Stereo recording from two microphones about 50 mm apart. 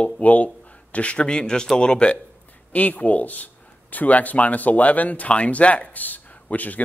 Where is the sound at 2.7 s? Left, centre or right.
Left.